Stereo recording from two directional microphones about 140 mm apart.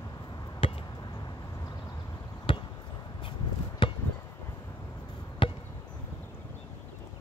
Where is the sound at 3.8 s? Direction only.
35° left (ahead or behind).